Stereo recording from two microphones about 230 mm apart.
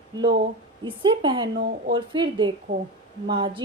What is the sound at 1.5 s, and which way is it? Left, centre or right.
Speech, right.